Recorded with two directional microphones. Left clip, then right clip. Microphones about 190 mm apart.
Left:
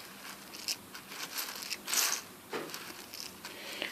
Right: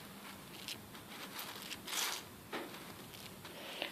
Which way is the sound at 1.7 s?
20° right (ahead or behind).